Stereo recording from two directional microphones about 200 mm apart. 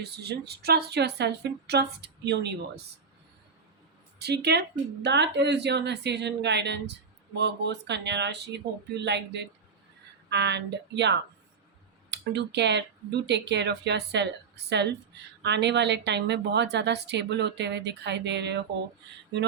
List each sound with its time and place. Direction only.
0.0 s a woman's voice: 55° right (ahead or behind)
4.2 s a woman's voice: 55° right (ahead or behind)